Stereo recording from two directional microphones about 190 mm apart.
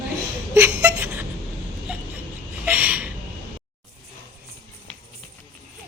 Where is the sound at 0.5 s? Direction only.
15° right (ahead or behind).